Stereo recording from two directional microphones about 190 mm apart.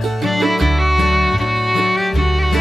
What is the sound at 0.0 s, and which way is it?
Music, centre (ahead or behind).